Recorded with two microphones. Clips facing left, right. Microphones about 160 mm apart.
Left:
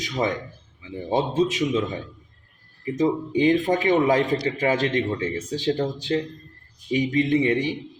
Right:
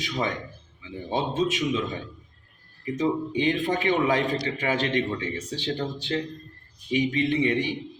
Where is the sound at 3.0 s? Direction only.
40° left (ahead or behind).